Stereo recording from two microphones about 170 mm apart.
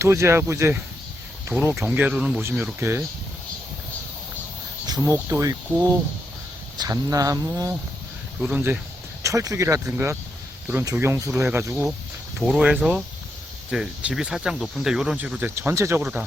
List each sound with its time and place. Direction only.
0.0 s speech: 15° right (ahead or behind)
4.9 s speech: 20° right (ahead or behind)
8.4 s speech: 10° right (ahead or behind)
12.4 s speech: 5° right (ahead or behind)